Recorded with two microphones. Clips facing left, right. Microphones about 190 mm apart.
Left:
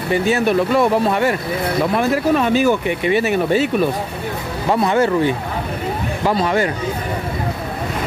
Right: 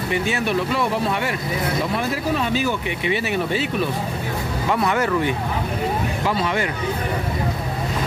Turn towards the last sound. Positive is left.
turn(degrees=40)  # may be behind; listen again after turning